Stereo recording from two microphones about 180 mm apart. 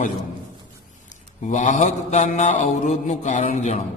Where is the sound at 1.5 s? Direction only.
45° left (ahead or behind).